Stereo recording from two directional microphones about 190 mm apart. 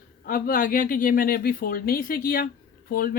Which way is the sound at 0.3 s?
50° left (ahead or behind).